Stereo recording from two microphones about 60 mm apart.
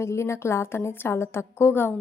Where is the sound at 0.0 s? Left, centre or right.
Left.